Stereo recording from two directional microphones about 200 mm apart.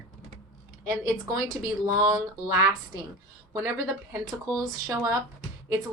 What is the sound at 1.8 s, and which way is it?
Speech, 15° right (ahead or behind).